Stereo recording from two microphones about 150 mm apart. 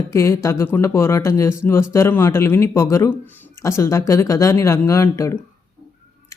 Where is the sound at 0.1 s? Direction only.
20° left (ahead or behind).